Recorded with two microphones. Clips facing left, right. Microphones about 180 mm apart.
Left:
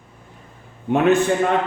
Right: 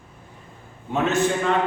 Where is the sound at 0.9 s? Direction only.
60° left (ahead or behind).